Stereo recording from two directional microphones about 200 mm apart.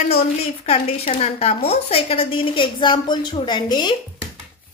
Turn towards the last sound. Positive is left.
turn(degrees=20)  # may be behind; listen again after turning